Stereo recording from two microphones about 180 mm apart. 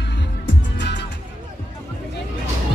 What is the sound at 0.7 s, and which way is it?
Music, 75° left (ahead or behind).